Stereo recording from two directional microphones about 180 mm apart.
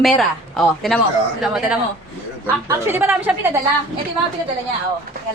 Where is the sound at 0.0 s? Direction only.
Centre (ahead or behind).